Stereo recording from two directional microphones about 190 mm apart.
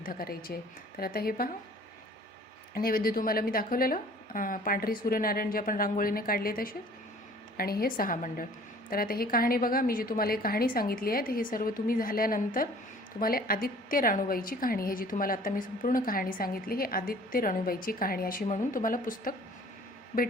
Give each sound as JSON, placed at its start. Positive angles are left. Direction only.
{"t": 0.0, "sound": "a woman's voice", "side_deg": 50}
{"t": 2.7, "sound": "a woman's voice", "side_deg": 50}